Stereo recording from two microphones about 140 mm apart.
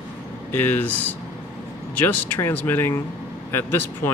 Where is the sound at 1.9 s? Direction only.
10° left (ahead or behind).